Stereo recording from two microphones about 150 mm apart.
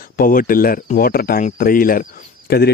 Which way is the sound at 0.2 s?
70° left (ahead or behind).